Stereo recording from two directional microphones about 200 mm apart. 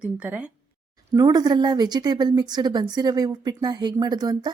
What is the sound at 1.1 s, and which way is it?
A woman's voice, 20° right (ahead or behind).